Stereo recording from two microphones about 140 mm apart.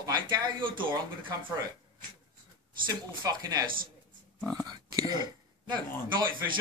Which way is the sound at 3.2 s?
25° right (ahead or behind).